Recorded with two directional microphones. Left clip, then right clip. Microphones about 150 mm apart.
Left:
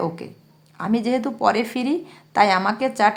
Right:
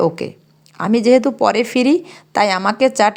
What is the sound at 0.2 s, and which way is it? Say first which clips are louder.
Speech: right 11 dB; 45° right (ahead or behind).